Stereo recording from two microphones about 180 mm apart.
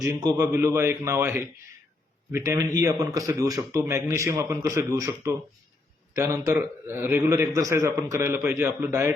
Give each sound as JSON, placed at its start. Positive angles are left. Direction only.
{"t": 0.0, "sound": "a man's voice", "side_deg": -20}